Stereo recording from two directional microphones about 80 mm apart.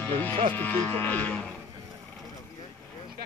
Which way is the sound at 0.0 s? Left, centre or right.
Left.